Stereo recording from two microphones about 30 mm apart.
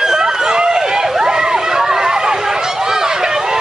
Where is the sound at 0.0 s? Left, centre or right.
Right.